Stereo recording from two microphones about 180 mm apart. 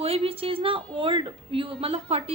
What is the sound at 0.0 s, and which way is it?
A woman's voice, 35° right (ahead or behind).